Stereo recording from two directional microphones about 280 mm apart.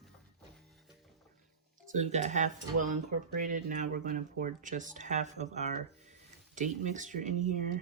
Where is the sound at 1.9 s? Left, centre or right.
Right.